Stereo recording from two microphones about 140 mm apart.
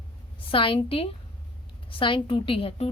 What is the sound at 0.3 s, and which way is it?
A woman's voice, 40° left (ahead or behind).